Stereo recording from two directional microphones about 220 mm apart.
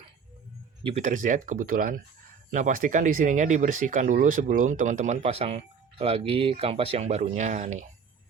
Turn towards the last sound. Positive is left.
turn(degrees=-35)  # may be behind; listen again after turning